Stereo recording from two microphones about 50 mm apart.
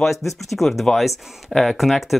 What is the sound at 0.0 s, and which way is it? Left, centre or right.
Speech, centre.